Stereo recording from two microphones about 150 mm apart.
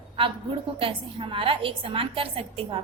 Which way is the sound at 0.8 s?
35° right (ahead or behind).